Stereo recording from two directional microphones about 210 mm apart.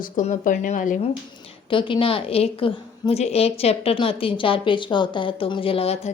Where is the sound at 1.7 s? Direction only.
25° left (ahead or behind).